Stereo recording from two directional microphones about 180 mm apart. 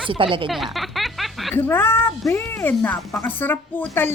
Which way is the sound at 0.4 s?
Centre (ahead or behind).